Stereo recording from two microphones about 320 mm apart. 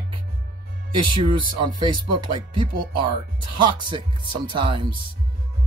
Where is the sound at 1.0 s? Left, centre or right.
Centre.